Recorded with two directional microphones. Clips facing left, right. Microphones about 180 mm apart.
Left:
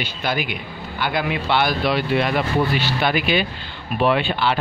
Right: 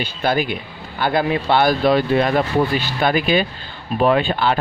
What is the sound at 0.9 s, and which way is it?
Speech, 45° right (ahead or behind).